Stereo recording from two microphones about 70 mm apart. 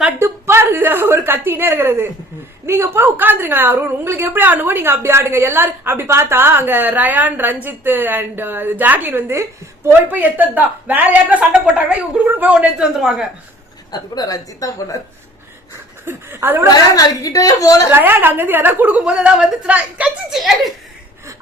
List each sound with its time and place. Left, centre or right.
0.2 s a woman's voice: right
9.3 s a woman's voice: right
10.1 s a woman's voice: right; by 13.2 s centre
13.9 s a woman's voice: left
16.0 s speech: right
16.7 s a woman's voice: left
17.9 s a woman's voice: right
19.0 s speech: centre
20.3 s speech: centre